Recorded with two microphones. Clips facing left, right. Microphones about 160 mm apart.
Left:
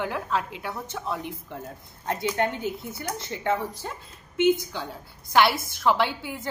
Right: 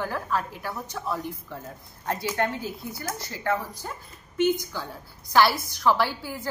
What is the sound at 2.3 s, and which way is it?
A woman's voice, 20° left (ahead or behind).